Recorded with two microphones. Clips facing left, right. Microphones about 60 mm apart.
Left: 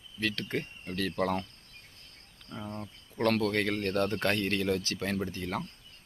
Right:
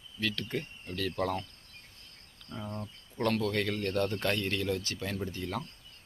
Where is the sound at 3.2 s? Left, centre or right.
Left.